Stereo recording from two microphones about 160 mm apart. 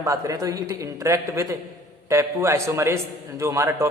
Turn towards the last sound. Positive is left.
turn(degrees=-20)  # may be behind; listen again after turning